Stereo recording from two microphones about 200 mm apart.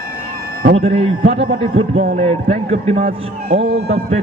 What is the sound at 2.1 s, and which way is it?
A man's voice, 30° right (ahead or behind).